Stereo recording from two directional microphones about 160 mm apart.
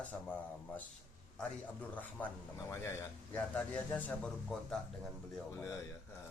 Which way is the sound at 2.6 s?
15° left (ahead or behind).